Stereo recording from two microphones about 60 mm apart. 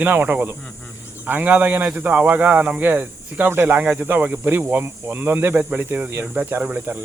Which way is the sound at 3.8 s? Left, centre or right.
Right.